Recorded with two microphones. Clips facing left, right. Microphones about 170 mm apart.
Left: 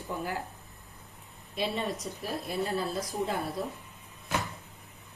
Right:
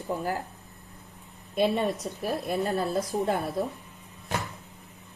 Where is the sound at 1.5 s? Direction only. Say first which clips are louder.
Right 7 dB; 55° right (ahead or behind).